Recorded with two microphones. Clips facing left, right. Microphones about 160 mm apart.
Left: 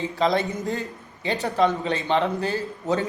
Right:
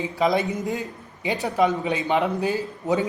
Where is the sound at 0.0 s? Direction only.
5° right (ahead or behind).